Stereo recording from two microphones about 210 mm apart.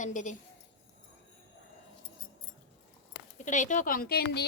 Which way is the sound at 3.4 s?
35° left (ahead or behind).